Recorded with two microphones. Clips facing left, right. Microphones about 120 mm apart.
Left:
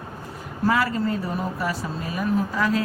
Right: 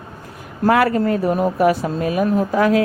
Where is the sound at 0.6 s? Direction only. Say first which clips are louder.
Right 7 dB; 60° right (ahead or behind).